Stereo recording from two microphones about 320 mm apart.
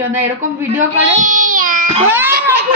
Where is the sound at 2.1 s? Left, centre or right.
Centre.